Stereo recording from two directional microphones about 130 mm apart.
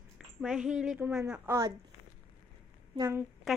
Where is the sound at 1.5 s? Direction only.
25° right (ahead or behind).